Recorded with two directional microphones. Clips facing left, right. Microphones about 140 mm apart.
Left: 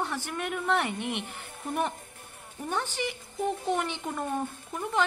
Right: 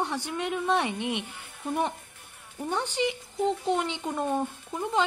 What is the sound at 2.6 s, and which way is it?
A woman's voice, 15° right (ahead or behind).